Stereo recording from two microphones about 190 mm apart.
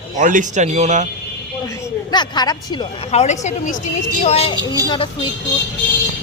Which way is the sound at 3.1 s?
35° left (ahead or behind).